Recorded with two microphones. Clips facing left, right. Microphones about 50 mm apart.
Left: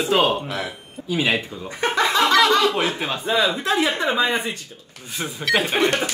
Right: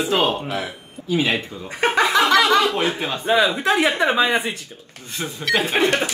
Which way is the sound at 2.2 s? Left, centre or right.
Centre.